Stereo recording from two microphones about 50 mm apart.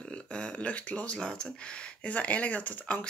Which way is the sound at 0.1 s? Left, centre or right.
Left.